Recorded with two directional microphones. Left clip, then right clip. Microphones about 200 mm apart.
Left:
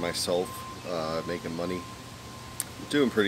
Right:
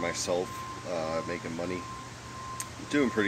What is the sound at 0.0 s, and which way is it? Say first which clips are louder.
Speech: left 2 dB; 15° left (ahead or behind).